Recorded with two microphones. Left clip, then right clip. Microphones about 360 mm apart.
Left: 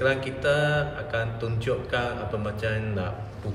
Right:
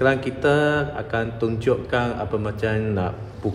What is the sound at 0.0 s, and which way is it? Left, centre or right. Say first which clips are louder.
Mantra: right 5 dB; centre.